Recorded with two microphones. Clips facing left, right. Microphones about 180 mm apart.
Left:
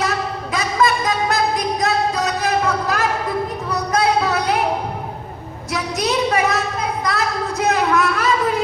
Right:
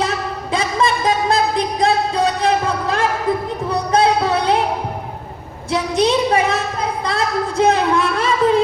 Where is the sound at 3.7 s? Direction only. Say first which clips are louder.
Right 3 dB; 30° right (ahead or behind).